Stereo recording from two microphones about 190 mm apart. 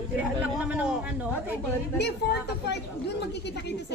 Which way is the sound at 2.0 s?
65° left (ahead or behind).